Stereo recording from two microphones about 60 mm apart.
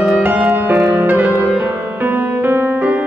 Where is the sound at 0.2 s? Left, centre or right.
Right.